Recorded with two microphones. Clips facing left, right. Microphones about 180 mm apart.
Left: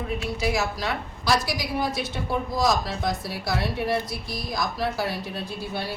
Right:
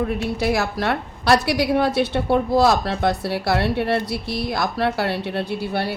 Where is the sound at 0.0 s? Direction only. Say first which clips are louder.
Right 5 dB; 60° right (ahead or behind).